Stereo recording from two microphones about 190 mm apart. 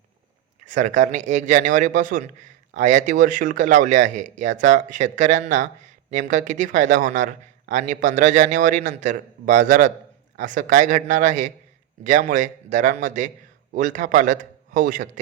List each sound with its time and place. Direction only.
0.6 s a man's voice: 40° right (ahead or behind)